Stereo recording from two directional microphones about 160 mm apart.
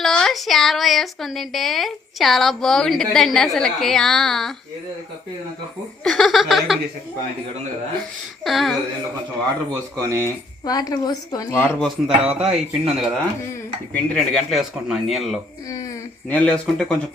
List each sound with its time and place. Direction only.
0.0 s speech: 5° left (ahead or behind)
6.1 s speech: centre (ahead or behind)
8.4 s speech: centre (ahead or behind)
10.0 s speech: 20° right (ahead or behind)
10.2 s speech: 25° left (ahead or behind)
11.8 s speech: 5° right (ahead or behind)